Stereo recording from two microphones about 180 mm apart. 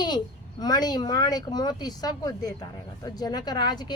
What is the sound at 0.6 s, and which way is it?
Speech, 20° left (ahead or behind).